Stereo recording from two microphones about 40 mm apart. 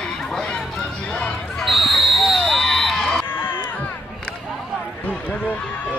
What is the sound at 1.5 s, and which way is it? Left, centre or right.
Basketball bounce, centre.